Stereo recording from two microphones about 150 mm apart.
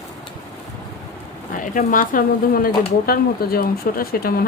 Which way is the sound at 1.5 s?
65° left (ahead or behind).